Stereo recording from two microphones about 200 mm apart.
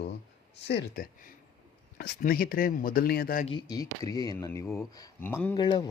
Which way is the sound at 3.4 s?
25° left (ahead or behind).